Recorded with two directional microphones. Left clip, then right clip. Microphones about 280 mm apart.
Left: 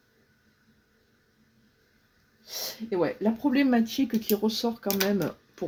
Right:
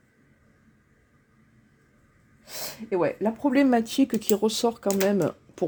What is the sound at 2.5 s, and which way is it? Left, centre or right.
Speech, right.